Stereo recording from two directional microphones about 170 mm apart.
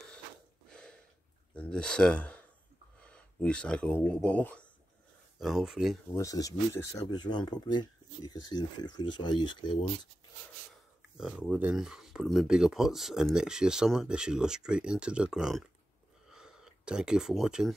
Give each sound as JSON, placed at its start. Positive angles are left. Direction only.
{"t": 0.7, "sound": "a sound", "side_deg": 5}
{"t": 1.5, "sound": "speech", "side_deg": 5}
{"t": 5.4, "sound": "speech", "side_deg": 0}
{"t": 6.1, "sound": "speech", "side_deg": 20}
{"t": 10.7, "sound": "speech", "side_deg": -5}
{"t": 16.3, "sound": "a sound", "side_deg": -5}